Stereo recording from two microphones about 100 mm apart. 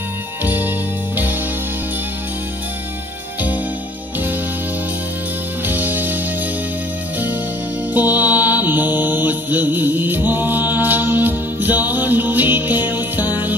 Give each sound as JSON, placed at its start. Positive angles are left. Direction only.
{"t": 0.4, "sound": "music", "side_deg": -20}
{"t": 5.7, "sound": "music", "side_deg": -20}
{"t": 7.9, "sound": "mantra", "side_deg": -15}